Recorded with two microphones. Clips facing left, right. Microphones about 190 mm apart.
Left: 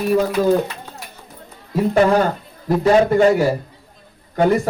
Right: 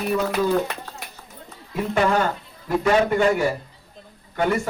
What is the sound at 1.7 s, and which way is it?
A man's voice, 40° left (ahead or behind).